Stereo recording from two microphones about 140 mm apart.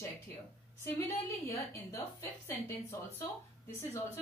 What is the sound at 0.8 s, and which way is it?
A woman's voice, 20° left (ahead or behind).